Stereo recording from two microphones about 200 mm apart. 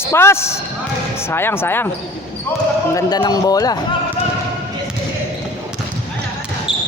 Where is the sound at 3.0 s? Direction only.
20° left (ahead or behind).